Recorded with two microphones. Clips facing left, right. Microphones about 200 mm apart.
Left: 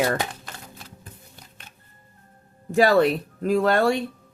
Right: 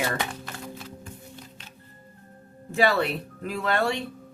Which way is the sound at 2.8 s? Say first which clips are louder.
Left 6 dB; 45° left (ahead or behind).